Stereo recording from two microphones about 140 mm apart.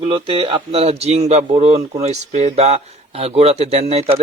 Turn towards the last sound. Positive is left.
turn(degrees=-45)  # may be behind; listen again after turning